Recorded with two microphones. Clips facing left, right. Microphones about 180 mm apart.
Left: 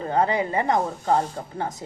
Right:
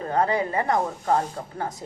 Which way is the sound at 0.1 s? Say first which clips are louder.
Left 1 dB; 20° left (ahead or behind).